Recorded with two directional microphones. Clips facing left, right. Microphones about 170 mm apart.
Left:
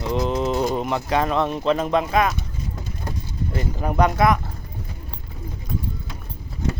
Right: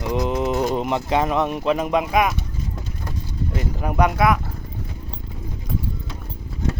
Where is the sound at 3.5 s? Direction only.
5° right (ahead or behind).